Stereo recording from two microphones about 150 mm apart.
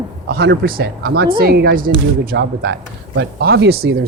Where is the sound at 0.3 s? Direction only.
85° right.